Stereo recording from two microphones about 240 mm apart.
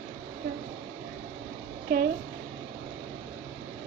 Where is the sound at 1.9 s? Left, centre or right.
Right.